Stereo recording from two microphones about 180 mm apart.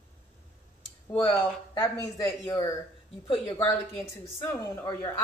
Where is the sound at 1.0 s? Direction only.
25° left (ahead or behind).